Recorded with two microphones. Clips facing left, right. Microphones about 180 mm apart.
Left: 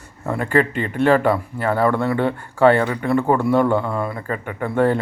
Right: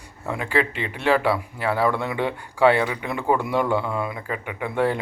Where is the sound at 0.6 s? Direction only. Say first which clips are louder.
Left 5 dB; 45° left (ahead or behind).